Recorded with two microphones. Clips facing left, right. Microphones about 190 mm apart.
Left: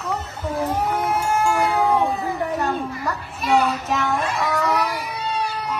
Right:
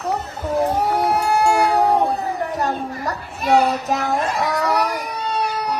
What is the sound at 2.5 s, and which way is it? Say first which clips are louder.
Children playing: even; 40° right (ahead or behind).